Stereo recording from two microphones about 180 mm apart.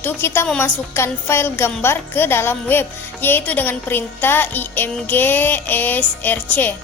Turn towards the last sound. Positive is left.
turn(degrees=10)  # may be behind; listen again after turning